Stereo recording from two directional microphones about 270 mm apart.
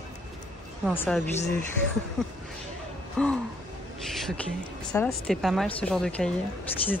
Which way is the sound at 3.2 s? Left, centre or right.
Centre.